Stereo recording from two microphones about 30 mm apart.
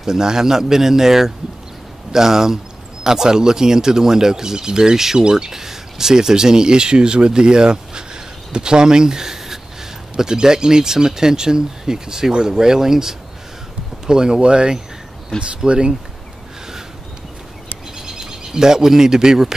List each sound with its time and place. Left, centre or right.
0.0 s speech: centre
4.9 s speech: centre
5.2 s speech: right
5.5 s speech: centre
14.0 s speech: right
17.9 s a sound: centre